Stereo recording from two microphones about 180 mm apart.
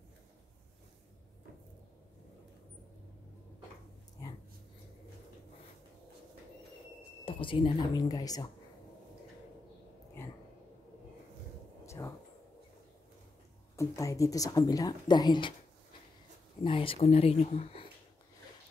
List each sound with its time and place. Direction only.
4.2 s dog: 20° left (ahead or behind)
7.2 s speech: 30° left (ahead or behind)
11.8 s a sound: 15° left (ahead or behind)
13.7 s speech: 20° left (ahead or behind)
16.6 s speech: 30° left (ahead or behind)